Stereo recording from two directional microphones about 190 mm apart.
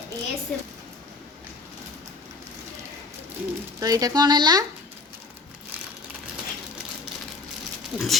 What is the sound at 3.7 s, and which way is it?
Speech, 20° right (ahead or behind).